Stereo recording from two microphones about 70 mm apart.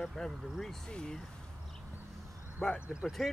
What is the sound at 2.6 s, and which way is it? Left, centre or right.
Speech, centre.